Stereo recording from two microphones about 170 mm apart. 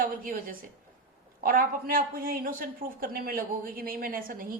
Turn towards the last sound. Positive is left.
turn(degrees=-55)  # may be behind; listen again after turning